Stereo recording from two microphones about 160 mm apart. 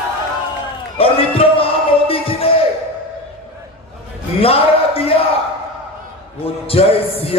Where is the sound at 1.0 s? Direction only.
35° left (ahead or behind).